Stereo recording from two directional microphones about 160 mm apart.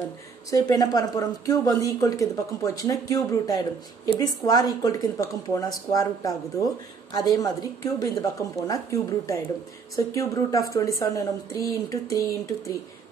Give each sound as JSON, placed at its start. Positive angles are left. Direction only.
{"t": 0.5, "sound": "speech", "side_deg": 20}